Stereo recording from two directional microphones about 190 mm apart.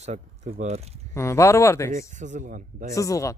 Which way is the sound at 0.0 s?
35° right (ahead or behind).